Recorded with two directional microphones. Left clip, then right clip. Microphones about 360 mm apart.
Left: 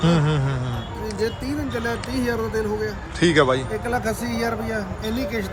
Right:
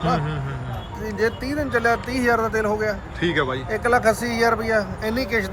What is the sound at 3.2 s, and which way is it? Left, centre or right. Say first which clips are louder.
Speech: left 7 dB; centre.